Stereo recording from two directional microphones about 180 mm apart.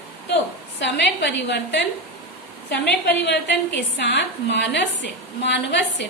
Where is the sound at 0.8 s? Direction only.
70° left (ahead or behind).